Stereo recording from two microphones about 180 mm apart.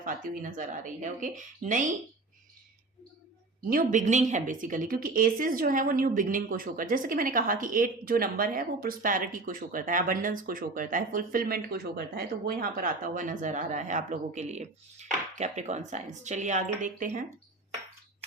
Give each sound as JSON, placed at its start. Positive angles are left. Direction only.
{"t": 0.0, "sound": "a woman's voice", "side_deg": -45}
{"t": 3.7, "sound": "a woman's voice", "side_deg": -50}